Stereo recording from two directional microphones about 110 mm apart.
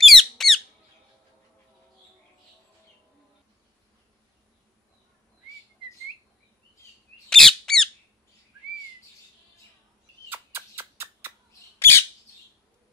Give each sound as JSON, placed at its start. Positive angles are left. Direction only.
{"t": 0.0, "sound": "squeak", "side_deg": 0}
{"t": 7.2, "sound": "squawk", "side_deg": 5}
{"t": 10.3, "sound": "a sound", "side_deg": -20}
{"t": 11.8, "sound": "bird", "side_deg": 20}